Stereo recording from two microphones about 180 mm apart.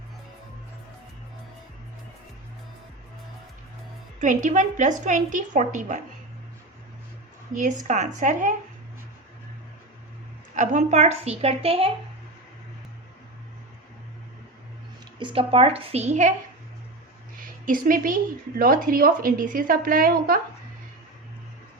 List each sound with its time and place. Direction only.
4.2 s a woman's voice: 45° right (ahead or behind)
7.5 s a woman's voice: 45° right (ahead or behind)
10.5 s a woman's voice: 45° right (ahead or behind)
15.2 s a woman's voice: 30° right (ahead or behind)
17.4 s a woman's voice: 50° right (ahead or behind)